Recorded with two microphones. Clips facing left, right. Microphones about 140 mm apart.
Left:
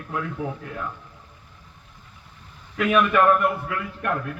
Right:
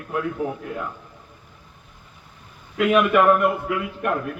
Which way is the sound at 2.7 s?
15° right (ahead or behind).